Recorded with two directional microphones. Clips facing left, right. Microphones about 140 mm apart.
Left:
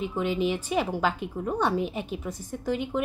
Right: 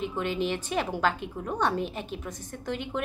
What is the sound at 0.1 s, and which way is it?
A woman's voice, 10° left (ahead or behind).